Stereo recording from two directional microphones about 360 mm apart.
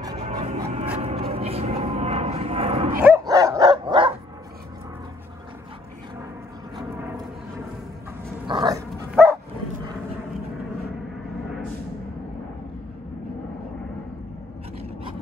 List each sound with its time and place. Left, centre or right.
0.0 s vehicle: centre
3.0 s dog: centre
6.8 s a sound: centre
8.5 s dog: centre